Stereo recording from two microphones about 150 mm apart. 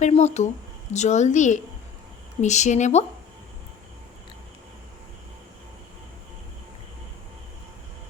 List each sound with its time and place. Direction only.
0.0 s a woman's voice: 50° left (ahead or behind)